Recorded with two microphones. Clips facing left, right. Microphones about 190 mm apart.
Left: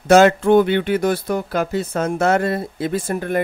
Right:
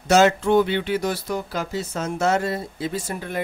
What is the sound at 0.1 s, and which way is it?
Speech, 55° left (ahead or behind).